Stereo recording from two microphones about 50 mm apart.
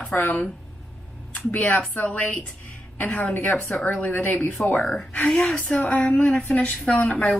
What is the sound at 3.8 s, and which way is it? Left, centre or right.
Speech, left.